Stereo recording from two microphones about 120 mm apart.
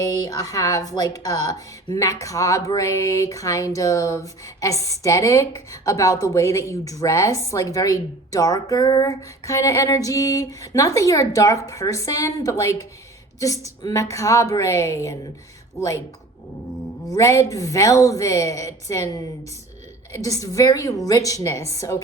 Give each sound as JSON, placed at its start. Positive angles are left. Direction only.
{"t": 0.0, "sound": "a woman's voice", "side_deg": 30}
{"t": 13.8, "sound": "a woman's voice", "side_deg": 25}
{"t": 17.1, "sound": "a woman's voice", "side_deg": 25}